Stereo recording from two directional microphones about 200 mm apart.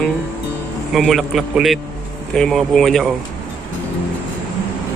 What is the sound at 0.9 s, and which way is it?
Speech, centre (ahead or behind).